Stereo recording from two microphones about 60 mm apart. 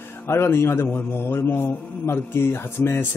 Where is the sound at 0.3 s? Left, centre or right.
Left.